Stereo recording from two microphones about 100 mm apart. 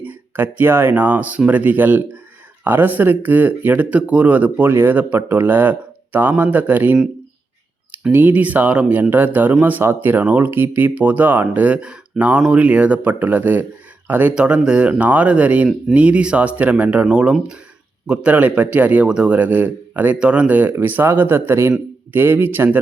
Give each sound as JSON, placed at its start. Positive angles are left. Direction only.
{"t": 0.0, "sound": "speech", "side_deg": -20}
{"t": 8.1, "sound": "a man's voice", "side_deg": -15}